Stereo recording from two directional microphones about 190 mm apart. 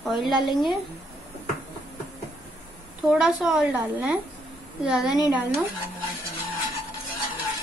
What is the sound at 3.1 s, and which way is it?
A woman's voice, 5° right (ahead or behind).